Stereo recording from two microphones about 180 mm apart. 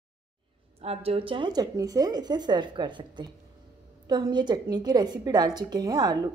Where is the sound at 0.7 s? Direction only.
35° right (ahead or behind).